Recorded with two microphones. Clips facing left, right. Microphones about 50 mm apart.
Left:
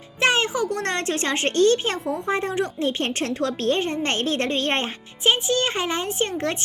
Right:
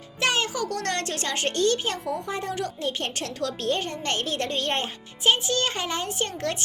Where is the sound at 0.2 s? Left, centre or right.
Left.